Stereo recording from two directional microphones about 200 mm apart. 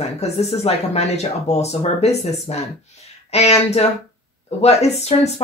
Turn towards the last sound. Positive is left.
turn(degrees=35)  # may be behind; listen again after turning